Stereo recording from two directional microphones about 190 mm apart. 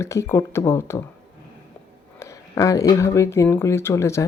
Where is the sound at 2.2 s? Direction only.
15° left (ahead or behind).